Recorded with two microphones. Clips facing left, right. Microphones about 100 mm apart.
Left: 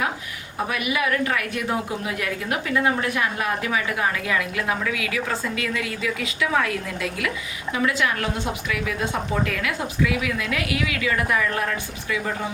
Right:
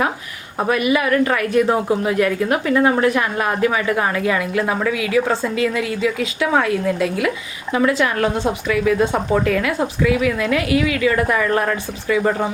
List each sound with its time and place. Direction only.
0.7 s a woman's voice: 40° right (ahead or behind)